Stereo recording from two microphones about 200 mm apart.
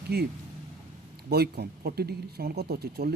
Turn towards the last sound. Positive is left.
turn(degrees=-50)  # may be behind; listen again after turning